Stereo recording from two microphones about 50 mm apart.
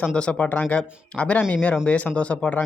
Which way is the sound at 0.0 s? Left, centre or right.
Left.